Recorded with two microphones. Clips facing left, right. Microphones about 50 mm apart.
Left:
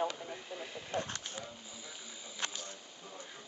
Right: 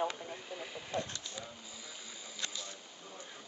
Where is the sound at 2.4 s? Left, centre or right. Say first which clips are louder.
Left 2 dB; left.